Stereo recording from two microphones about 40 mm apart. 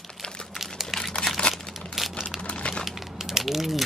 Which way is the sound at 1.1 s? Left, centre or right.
Centre.